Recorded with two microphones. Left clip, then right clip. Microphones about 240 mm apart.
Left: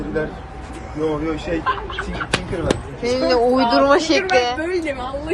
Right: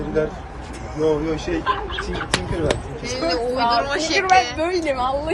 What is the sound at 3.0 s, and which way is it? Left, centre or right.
A woman's voice, centre.